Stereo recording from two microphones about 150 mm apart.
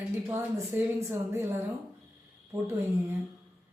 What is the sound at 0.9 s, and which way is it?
Speech, 20° right (ahead or behind).